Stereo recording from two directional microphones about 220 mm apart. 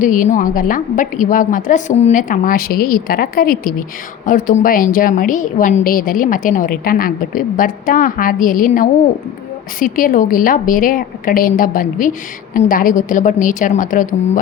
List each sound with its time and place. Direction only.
0.0 s a woman's voice: 35° left (ahead or behind)